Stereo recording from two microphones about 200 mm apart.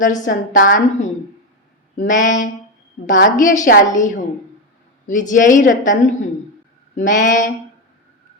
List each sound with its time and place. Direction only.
0.0 s a woman's voice: 40° left (ahead or behind)